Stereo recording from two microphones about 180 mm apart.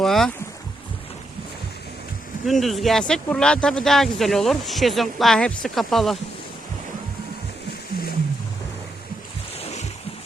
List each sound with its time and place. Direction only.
0.0 s speech: centre (ahead or behind)
2.5 s speech: centre (ahead or behind)
9.6 s waves: 35° left (ahead or behind)